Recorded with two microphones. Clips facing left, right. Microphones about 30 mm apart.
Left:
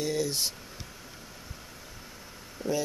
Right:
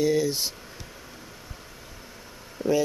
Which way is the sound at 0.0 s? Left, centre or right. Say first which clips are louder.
Right 6 dB; centre.